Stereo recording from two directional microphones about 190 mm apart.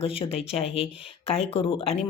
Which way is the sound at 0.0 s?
30° left (ahead or behind).